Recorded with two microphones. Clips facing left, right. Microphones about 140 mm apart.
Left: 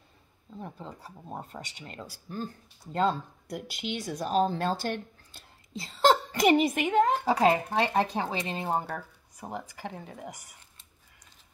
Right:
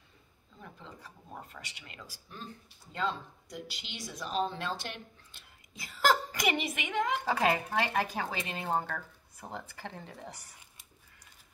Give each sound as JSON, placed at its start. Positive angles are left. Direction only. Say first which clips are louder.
{"t": 0.6, "sound": "speech", "louder": "left 8 dB", "side_deg": 35}
{"t": 3.4, "sound": "speech", "louder": "left 10 dB", "side_deg": 55}
{"t": 5.7, "sound": "a sound", "louder": "left 5 dB", "side_deg": 25}
{"t": 6.5, "sound": "speech", "louder": "left 10 dB", "side_deg": 40}
{"t": 7.2, "sound": "speech", "louder": "left 5 dB", "side_deg": 20}